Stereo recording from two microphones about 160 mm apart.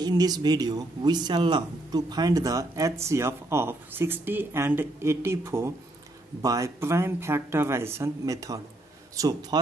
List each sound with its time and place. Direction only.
0.0 s a man's voice: 25° right (ahead or behind)